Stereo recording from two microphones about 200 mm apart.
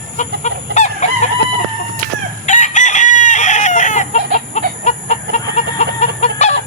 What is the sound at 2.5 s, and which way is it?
Chicken, 35° left (ahead or behind).